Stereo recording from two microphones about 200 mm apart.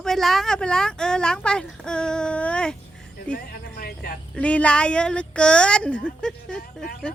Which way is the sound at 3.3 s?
50° left (ahead or behind).